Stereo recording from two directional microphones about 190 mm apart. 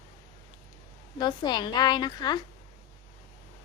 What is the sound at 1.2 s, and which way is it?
A woman's voice, 20° left (ahead or behind).